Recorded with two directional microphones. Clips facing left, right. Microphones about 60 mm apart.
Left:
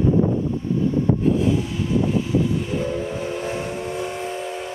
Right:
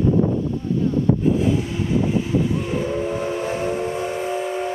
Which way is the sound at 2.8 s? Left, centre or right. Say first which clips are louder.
Right 2 dB; right.